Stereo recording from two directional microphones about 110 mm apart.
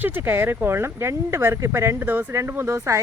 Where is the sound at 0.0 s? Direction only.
20° right (ahead or behind).